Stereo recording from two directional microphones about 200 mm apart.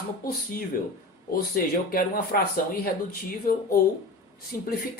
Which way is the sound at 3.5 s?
45° left (ahead or behind).